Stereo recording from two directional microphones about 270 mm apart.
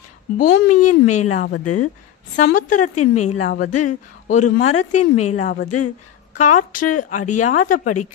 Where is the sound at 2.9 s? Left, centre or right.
Left.